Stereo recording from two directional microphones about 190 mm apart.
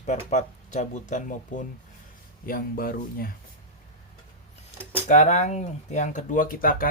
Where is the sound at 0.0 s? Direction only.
40° left (ahead or behind).